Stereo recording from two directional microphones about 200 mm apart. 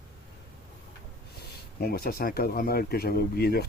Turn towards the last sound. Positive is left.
turn(degrees=50)  # may be behind; listen again after turning